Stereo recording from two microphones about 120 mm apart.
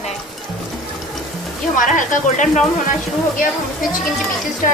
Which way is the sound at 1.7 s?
90° left.